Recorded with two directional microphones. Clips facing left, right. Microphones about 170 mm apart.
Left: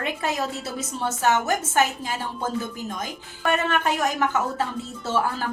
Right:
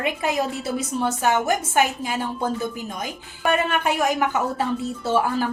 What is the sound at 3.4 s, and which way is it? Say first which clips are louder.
Speech: right 1 dB; 15° right (ahead or behind).